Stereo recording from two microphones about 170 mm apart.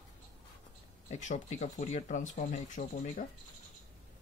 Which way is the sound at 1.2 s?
45° left (ahead or behind).